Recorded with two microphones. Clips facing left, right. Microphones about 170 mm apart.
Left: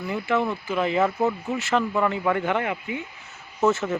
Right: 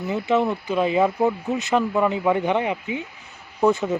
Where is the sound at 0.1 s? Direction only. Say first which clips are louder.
Right 3 dB; 20° right (ahead or behind).